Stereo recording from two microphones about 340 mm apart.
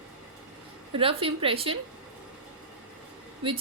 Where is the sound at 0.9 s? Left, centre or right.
Centre.